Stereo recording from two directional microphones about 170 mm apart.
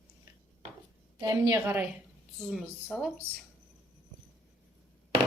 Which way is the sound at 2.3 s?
5° left (ahead or behind).